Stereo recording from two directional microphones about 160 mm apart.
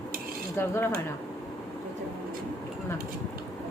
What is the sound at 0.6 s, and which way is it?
Speech, 15° left (ahead or behind).